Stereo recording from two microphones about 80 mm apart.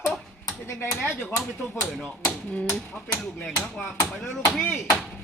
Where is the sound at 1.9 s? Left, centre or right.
Centre.